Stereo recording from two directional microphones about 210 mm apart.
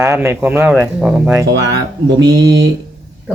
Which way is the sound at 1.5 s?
55° right (ahead or behind).